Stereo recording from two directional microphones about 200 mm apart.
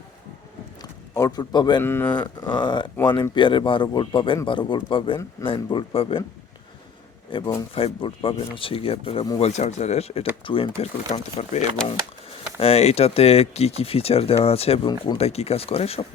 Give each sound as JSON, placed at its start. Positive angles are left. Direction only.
{"t": 0.8, "sound": "a sound", "side_deg": 20}
{"t": 1.8, "sound": "speech", "side_deg": 10}
{"t": 2.4, "sound": "speech", "side_deg": 20}
{"t": 7.3, "sound": "speech", "side_deg": 25}